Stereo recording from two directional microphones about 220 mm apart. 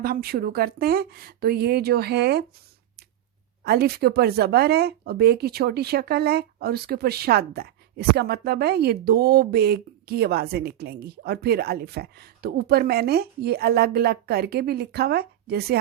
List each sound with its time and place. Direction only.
0.0 s speech: 45° right (ahead or behind)
3.6 s speech: 45° right (ahead or behind)